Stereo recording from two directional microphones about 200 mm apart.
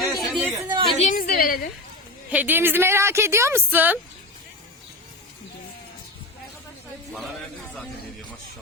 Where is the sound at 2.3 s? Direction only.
10° right (ahead or behind).